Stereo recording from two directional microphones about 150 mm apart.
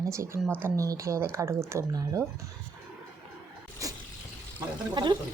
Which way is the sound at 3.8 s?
20° right (ahead or behind).